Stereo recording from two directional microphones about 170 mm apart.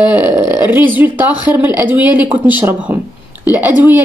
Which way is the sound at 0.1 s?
10° right (ahead or behind).